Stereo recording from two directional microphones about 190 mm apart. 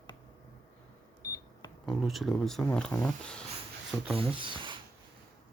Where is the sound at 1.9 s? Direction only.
Centre (ahead or behind).